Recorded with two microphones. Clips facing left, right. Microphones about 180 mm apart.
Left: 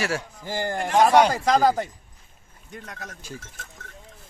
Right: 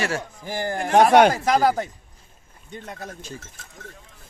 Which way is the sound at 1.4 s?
10° right (ahead or behind).